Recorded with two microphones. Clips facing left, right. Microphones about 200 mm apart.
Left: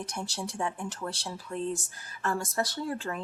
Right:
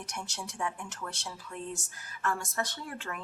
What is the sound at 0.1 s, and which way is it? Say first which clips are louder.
Speech: left 5 dB; 35° left (ahead or behind).